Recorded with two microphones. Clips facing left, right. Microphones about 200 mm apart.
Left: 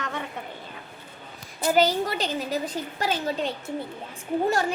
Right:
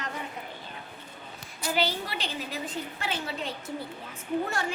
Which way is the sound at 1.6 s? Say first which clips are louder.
Left 8 dB; 45° left (ahead or behind).